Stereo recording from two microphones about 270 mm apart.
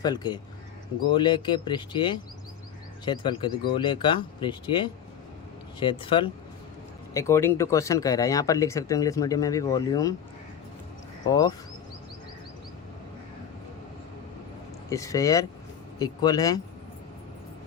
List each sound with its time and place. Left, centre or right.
0.0 s speech: centre
11.3 s speech: centre
14.8 s speech: centre